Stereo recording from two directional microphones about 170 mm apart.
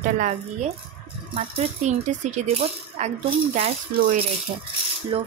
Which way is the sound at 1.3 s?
35° right (ahead or behind).